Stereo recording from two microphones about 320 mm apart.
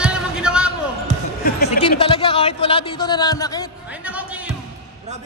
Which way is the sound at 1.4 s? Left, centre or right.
Left.